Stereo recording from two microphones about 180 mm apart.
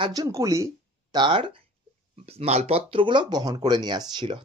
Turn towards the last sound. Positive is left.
turn(degrees=-25)  # may be behind; listen again after turning